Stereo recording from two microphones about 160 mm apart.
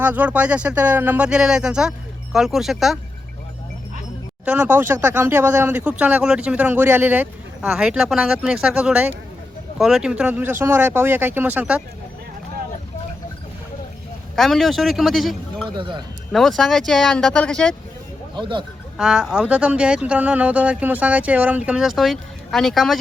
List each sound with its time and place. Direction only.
0.0 s speech: 10° right (ahead or behind)
4.4 s speech: 10° right (ahead or behind)
14.3 s speech: centre (ahead or behind)
15.7 s speech: 30° right (ahead or behind)
16.3 s speech: centre (ahead or behind)
18.3 s speech: 30° right (ahead or behind)
18.9 s speech: 5° right (ahead or behind)